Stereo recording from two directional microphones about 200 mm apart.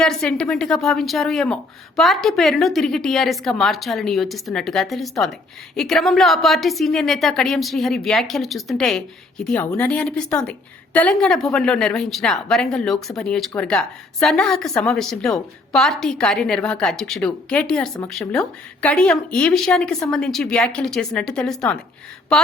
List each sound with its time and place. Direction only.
0.0 s a woman's voice: 5° left (ahead or behind)